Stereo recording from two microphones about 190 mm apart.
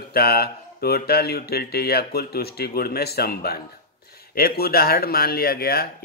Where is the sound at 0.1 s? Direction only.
55° left (ahead or behind).